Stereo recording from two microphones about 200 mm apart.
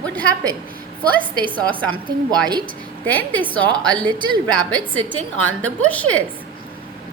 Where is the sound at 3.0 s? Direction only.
10° left (ahead or behind).